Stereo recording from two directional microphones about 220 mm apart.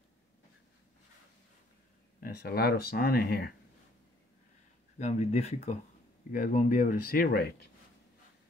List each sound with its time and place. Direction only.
2.1 s speech: 40° left (ahead or behind)
4.9 s speech: 30° left (ahead or behind)